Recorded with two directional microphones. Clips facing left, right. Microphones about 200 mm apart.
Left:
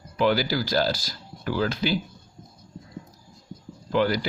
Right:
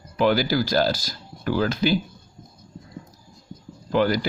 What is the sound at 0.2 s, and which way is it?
Speech, 50° right (ahead or behind).